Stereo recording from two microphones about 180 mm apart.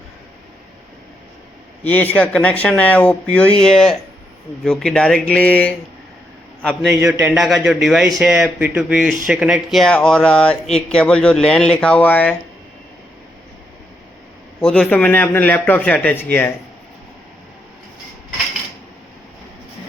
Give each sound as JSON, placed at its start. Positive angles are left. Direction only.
{"t": 1.8, "sound": "speech", "side_deg": 10}
{"t": 14.6, "sound": "speech", "side_deg": 5}